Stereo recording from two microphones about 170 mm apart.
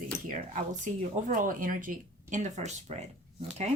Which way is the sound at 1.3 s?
50° right (ahead or behind).